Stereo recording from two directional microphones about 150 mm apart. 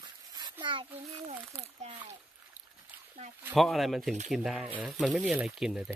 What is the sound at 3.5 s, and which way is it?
Speech, centre (ahead or behind).